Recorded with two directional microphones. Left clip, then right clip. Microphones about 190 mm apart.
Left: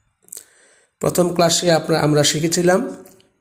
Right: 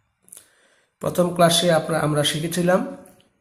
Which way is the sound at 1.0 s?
30° left (ahead or behind).